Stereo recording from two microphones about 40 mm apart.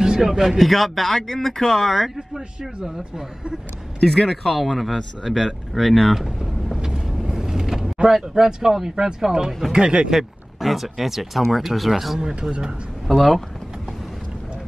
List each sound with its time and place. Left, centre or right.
0.0 s a sound: centre
0.3 s speech: centre
2.1 s a man's voice: centre
4.0 s speech: centre
6.7 s vehicle: centre
9.7 s speech: centre
10.6 s speech: centre
12.2 s a man's voice: centre
13.0 s speech: centre